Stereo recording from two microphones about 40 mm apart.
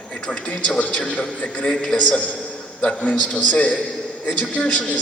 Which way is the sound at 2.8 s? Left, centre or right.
Left.